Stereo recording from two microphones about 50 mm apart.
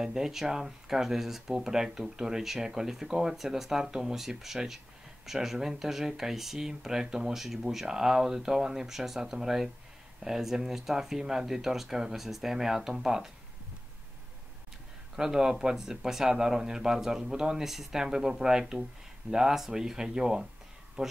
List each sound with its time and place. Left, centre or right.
0.0 s speech: centre
15.1 s speech: centre
21.0 s speech: right